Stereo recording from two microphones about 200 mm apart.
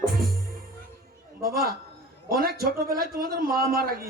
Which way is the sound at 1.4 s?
50° right (ahead or behind).